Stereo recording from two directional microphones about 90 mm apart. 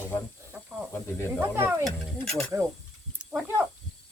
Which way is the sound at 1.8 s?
5° left (ahead or behind).